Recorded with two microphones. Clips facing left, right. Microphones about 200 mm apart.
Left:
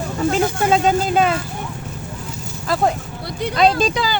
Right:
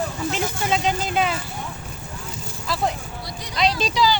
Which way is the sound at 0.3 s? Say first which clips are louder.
Left 9 dB; 45° left (ahead or behind).